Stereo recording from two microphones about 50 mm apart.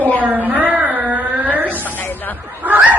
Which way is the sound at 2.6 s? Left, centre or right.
Right.